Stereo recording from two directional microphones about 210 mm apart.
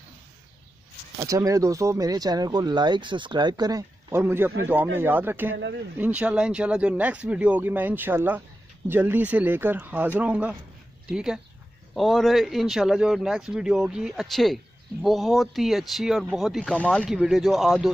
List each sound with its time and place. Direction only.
1.2 s a man's voice: 15° right (ahead or behind)